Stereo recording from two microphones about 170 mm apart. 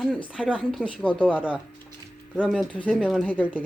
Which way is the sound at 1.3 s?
5° right (ahead or behind).